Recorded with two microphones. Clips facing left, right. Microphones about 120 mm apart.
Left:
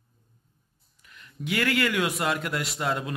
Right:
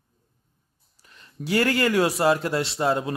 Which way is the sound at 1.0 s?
30° right (ahead or behind).